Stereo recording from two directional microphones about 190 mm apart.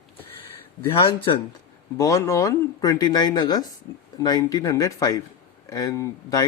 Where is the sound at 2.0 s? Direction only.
15° left (ahead or behind).